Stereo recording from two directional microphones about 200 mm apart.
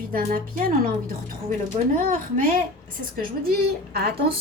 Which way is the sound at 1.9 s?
40° right (ahead or behind).